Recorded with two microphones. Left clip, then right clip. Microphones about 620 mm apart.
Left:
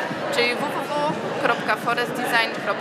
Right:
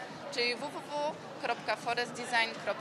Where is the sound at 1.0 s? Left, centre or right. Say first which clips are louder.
Left 12 dB; right.